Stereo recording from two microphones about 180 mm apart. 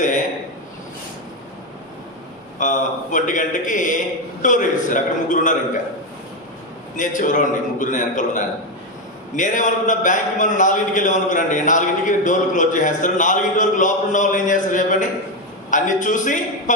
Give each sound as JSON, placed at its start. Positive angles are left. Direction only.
{"t": 0.0, "sound": "a sound", "side_deg": 45}
{"t": 2.6, "sound": "a man's voice", "side_deg": 45}
{"t": 6.9, "sound": "a man's voice", "side_deg": 45}